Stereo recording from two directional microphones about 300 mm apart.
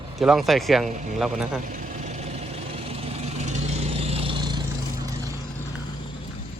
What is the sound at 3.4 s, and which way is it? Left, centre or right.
Vehicle, right.